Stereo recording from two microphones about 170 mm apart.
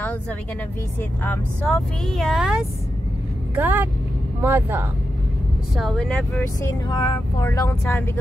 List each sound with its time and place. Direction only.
1.2 s speech: 5° left (ahead or behind); by 4.8 s 10° right (ahead or behind)
5.8 s speech: 5° left (ahead or behind)
6.6 s speech: 20° left (ahead or behind)
7.4 s speech: 15° left (ahead or behind)